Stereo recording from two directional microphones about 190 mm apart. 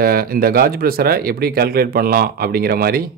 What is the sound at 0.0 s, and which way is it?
Speech, 50° right (ahead or behind).